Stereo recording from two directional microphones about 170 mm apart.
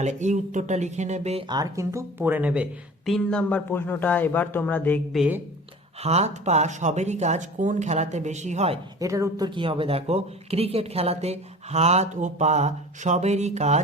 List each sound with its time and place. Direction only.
0.0 s speech: 45° right (ahead or behind)
1.5 s speech: 20° right (ahead or behind)
3.1 s speech: 5° left (ahead or behind)
5.1 s speech: 5° right (ahead or behind)
6.0 s speech: 40° right (ahead or behind)
9.0 s speech: 20° right (ahead or behind); by 13.8 s 40° right (ahead or behind)